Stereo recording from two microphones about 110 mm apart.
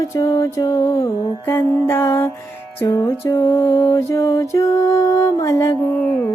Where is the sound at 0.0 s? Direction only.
25° left (ahead or behind).